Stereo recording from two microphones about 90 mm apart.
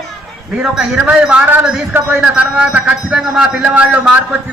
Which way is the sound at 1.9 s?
20° right (ahead or behind).